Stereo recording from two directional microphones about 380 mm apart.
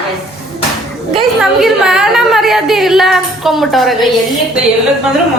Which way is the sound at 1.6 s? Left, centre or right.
Centre.